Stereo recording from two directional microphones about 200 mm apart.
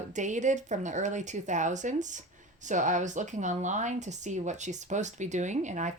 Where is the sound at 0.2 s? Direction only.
35° right (ahead or behind).